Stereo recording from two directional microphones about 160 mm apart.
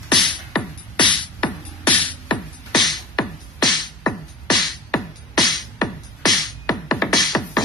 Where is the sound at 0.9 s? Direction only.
30° left (ahead or behind).